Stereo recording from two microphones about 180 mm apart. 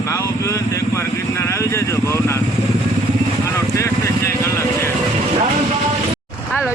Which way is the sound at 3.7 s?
15° left (ahead or behind).